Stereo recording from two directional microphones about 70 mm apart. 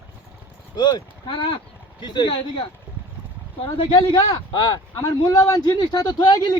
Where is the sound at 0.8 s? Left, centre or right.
Left.